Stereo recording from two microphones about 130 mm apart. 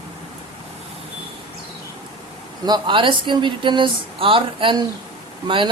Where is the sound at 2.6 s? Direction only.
35° right (ahead or behind).